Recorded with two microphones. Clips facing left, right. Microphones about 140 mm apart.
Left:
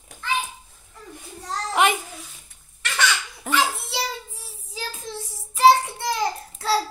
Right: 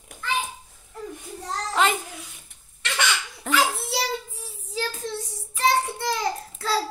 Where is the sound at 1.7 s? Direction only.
15° left (ahead or behind).